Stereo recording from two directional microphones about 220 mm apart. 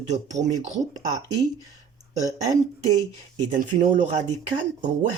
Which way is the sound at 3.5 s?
35° right (ahead or behind).